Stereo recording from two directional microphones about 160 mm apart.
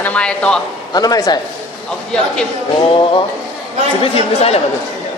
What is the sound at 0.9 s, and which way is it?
Speech, 25° left (ahead or behind).